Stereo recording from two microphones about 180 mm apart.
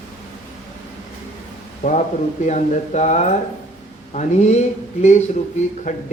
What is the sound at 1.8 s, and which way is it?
Speech, 40° left (ahead or behind).